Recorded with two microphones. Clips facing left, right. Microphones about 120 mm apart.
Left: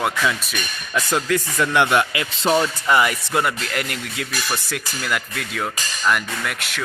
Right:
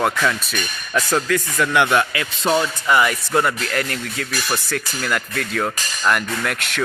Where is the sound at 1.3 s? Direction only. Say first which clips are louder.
Right 1 dB; 25° left (ahead or behind).